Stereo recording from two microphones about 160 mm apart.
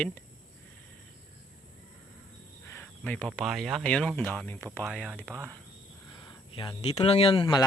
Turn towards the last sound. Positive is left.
turn(degrees=30)  # may be behind; listen again after turning